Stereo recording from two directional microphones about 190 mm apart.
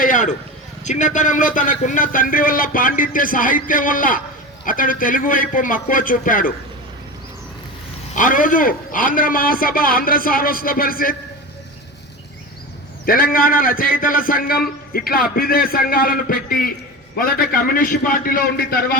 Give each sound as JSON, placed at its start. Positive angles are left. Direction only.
{"t": 0.0, "sound": "a sound", "side_deg": 40}
{"t": 0.9, "sound": "a man's voice", "side_deg": 40}
{"t": 8.1, "sound": "a man's voice", "side_deg": 45}
{"t": 13.1, "sound": "a man's voice", "side_deg": 50}